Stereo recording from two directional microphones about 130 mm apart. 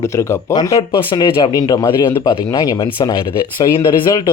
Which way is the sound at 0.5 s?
35° left (ahead or behind).